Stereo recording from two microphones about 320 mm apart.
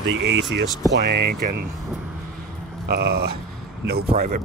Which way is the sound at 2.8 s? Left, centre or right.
Right.